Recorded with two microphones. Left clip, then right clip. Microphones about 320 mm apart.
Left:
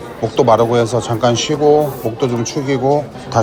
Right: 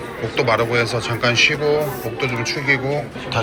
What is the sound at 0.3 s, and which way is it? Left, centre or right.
Speech, centre.